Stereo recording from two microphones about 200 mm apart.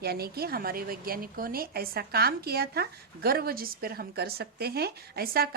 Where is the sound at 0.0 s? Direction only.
50° right (ahead or behind).